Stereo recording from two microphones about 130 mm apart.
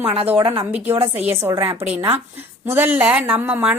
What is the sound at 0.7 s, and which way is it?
Speech, 10° right (ahead or behind).